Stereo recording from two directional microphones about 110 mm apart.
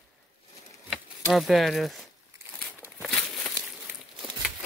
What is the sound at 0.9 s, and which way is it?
Speech, centre (ahead or behind).